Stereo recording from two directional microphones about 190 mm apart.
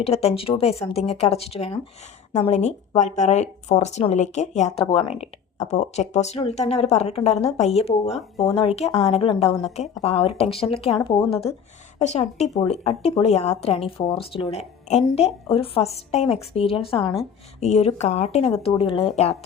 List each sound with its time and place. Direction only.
0.0 s speech: 35° left (ahead or behind)